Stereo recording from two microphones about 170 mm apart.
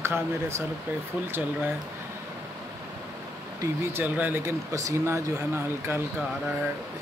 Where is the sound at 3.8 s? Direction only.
10° right (ahead or behind).